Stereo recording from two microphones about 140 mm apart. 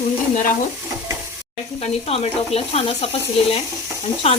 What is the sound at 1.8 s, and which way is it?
Speech, 45° left (ahead or behind).